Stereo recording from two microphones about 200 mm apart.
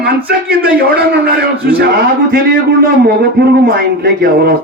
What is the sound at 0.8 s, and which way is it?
Speech, 50° right (ahead or behind).